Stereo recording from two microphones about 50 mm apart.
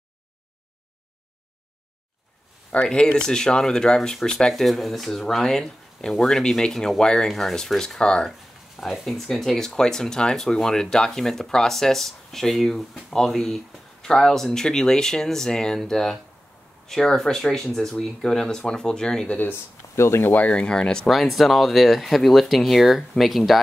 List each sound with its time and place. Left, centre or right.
2.7 s speech: centre
8.3 s speech: centre
19.2 s speech: left
19.5 s speech: left
20.4 s speech: left
21.1 s speech: centre